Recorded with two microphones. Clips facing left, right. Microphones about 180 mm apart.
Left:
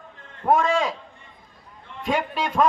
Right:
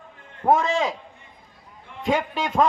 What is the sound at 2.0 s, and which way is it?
Speech, 20° right (ahead or behind).